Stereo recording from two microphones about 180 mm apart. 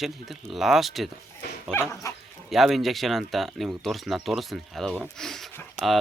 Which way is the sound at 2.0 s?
15° left (ahead or behind).